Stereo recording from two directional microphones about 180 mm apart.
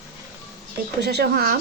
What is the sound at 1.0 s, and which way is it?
Speech, 65° right (ahead or behind).